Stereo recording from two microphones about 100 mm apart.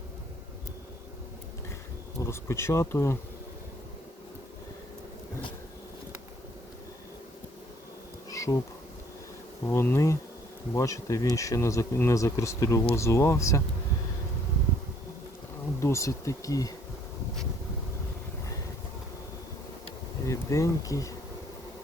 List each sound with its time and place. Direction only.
2.2 s speech: 25° left (ahead or behind)
8.3 s insect: 35° left (ahead or behind)
9.6 s speech: 25° left (ahead or behind)
15.8 s speech: 30° left (ahead or behind)
20.2 s speech: 30° left (ahead or behind)